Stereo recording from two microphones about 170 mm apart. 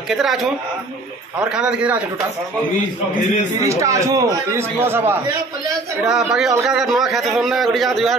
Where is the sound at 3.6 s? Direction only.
20° right (ahead or behind); by 8.1 s centre (ahead or behind).